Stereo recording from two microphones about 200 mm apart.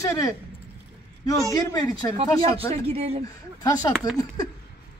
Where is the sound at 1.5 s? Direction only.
20° left (ahead or behind).